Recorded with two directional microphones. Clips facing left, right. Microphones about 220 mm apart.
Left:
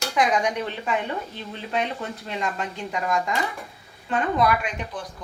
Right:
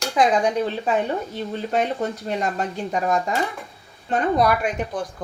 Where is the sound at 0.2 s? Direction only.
30° right (ahead or behind).